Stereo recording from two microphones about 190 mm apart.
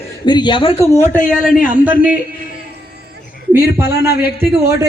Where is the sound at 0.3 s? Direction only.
25° left (ahead or behind).